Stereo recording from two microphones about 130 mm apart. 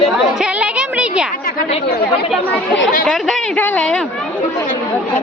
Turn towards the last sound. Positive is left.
turn(degrees=5)  # may be behind; listen again after turning